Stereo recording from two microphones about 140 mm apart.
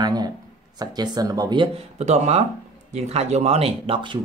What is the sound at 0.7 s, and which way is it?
Speech, 30° right (ahead or behind).